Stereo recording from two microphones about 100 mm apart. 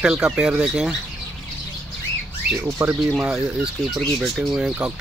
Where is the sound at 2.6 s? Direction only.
20° right (ahead or behind).